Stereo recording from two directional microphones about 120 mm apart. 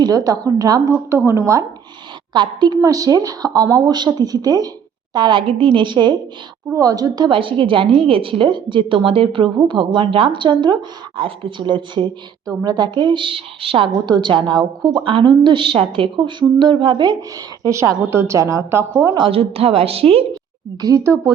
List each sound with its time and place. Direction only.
0.0 s a woman's voice: 30° right (ahead or behind)
2.3 s a woman's voice: 40° right (ahead or behind)
17.7 s a woman's voice: 25° right (ahead or behind)
19.1 s a woman's voice: 50° right (ahead or behind)
20.8 s a woman's voice: 25° right (ahead or behind)